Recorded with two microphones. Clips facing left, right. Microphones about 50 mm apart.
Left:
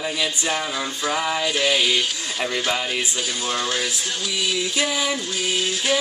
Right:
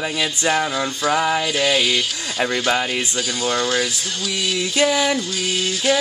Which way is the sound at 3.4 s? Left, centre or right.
Centre.